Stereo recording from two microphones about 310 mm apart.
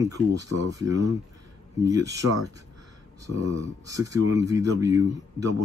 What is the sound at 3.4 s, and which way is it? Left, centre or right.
Speech, centre.